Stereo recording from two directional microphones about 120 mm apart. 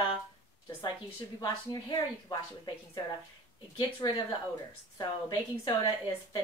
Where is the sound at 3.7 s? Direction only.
45° left (ahead or behind).